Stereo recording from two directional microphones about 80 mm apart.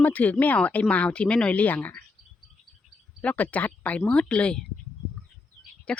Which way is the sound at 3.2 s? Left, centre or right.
Centre.